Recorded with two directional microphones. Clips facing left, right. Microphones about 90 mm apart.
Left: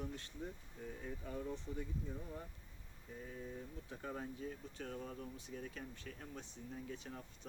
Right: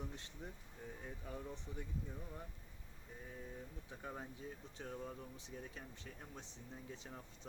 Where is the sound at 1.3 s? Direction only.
10° right (ahead or behind).